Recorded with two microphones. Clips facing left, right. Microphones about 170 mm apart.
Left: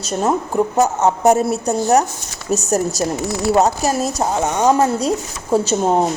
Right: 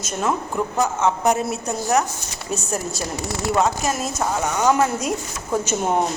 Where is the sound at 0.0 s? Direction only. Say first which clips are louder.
Left 5 dB; 35° left (ahead or behind).